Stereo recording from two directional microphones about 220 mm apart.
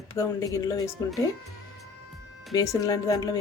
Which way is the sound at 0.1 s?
15° left (ahead or behind).